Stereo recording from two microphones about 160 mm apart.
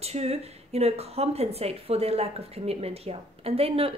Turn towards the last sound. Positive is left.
turn(degrees=-35)  # may be behind; listen again after turning